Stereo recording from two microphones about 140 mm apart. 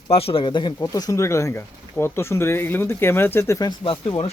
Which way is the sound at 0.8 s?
25° left (ahead or behind).